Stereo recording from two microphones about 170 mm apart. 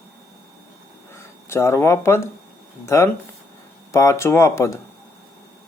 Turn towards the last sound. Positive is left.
turn(degrees=15)  # may be behind; listen again after turning